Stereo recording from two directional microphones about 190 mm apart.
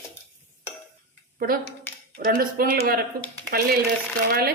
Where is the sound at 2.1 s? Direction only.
50° right (ahead or behind).